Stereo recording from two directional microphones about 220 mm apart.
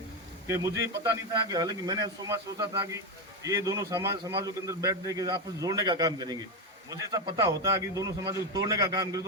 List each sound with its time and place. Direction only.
0.4 s a man's voice: 15° right (ahead or behind)